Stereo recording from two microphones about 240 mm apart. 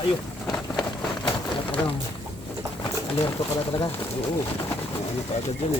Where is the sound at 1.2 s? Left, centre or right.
Left.